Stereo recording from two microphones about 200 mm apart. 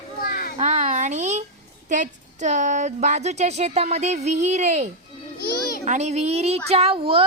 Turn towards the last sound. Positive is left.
turn(degrees=-25)  # may be behind; listen again after turning